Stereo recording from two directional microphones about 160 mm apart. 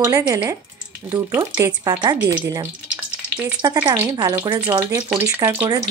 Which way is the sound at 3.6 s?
25° right (ahead or behind).